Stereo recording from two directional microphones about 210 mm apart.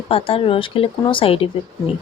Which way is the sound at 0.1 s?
25° left (ahead or behind).